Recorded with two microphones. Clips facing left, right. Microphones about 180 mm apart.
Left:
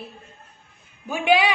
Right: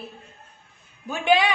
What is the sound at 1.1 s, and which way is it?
Speech, 10° left (ahead or behind).